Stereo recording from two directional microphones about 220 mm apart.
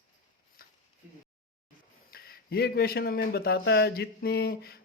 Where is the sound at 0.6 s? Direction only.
40° left (ahead or behind).